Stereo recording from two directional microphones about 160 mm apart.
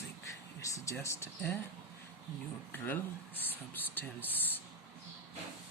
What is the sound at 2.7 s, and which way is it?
Speech, 10° left (ahead or behind).